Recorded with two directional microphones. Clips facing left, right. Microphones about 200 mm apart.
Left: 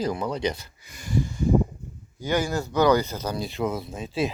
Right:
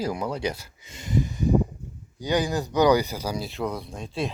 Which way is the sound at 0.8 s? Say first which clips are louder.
Right 1 dB; 25° right (ahead or behind).